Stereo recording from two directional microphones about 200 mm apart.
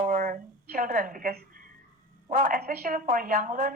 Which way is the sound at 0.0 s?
40° right (ahead or behind).